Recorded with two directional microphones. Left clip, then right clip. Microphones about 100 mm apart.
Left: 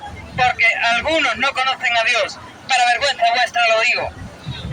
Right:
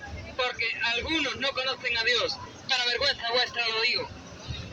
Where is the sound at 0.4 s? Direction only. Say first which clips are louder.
Left 14 dB; 25° left (ahead or behind).